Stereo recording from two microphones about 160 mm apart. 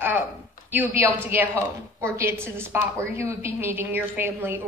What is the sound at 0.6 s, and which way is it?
A woman's voice, 10° right (ahead or behind).